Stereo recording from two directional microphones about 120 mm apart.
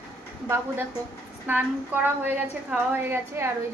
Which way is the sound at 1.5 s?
15° right (ahead or behind).